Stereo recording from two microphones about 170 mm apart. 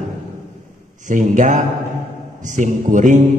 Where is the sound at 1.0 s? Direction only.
50° right (ahead or behind).